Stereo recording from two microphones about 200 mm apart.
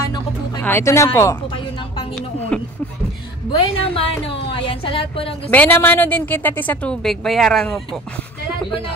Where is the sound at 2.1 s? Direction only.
5° left (ahead or behind).